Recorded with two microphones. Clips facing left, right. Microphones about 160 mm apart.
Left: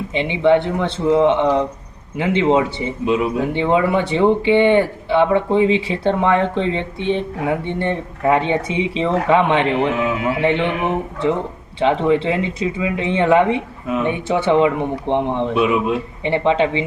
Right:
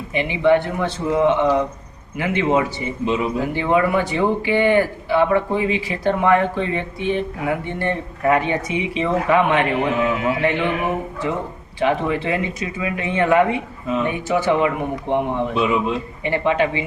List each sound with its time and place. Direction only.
0.1 s speech: 25° left (ahead or behind)
3.1 s a man's voice: 5° left (ahead or behind)
3.5 s speech: 25° left (ahead or behind)
15.5 s a man's voice: 5° left (ahead or behind)
16.2 s speech: 25° left (ahead or behind)